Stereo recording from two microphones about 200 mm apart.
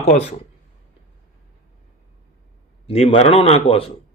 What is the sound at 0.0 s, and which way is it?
Speech, 30° left (ahead or behind).